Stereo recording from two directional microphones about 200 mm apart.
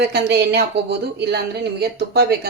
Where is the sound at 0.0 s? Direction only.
55° right (ahead or behind).